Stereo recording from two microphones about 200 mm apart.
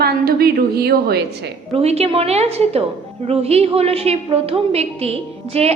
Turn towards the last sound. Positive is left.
turn(degrees=-30)  # may be behind; listen again after turning